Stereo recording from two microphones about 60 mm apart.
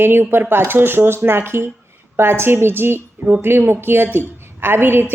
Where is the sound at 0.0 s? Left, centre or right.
Right.